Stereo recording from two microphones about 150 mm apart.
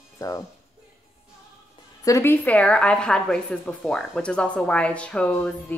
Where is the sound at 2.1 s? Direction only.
15° left (ahead or behind).